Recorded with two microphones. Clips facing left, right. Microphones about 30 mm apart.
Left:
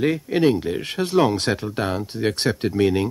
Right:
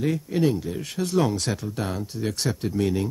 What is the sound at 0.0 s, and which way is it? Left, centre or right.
Speech, left.